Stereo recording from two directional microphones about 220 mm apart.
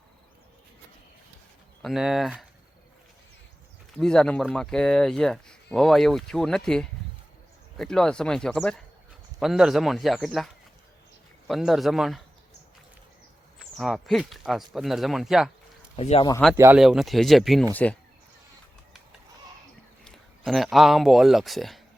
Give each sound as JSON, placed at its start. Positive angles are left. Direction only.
{"t": 1.8, "sound": "speech", "side_deg": 0}
{"t": 3.9, "sound": "speech", "side_deg": 0}
{"t": 13.7, "sound": "speech", "side_deg": 0}
{"t": 16.0, "sound": "speech", "side_deg": 25}
{"t": 16.6, "sound": "speech", "side_deg": -5}
{"t": 20.1, "sound": "speech", "side_deg": 0}